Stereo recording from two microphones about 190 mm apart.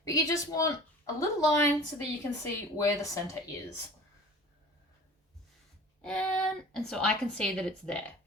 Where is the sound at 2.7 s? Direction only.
15° left (ahead or behind).